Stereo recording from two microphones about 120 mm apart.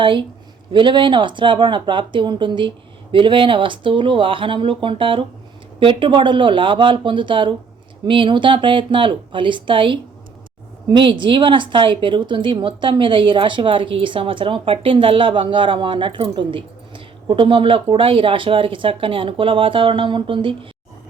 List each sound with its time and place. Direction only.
0.0 s a woman's voice: 45° right (ahead or behind)